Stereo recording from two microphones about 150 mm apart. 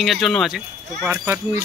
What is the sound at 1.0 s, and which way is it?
Speech, 15° right (ahead or behind).